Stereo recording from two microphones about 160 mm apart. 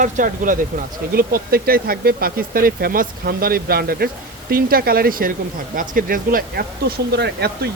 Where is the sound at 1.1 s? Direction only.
70° right (ahead or behind).